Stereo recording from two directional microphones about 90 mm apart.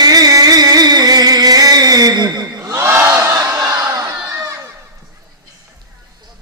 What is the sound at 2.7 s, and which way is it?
Crowd, 30° right (ahead or behind).